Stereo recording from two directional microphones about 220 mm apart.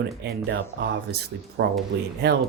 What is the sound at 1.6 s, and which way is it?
Speech, 50° right (ahead or behind).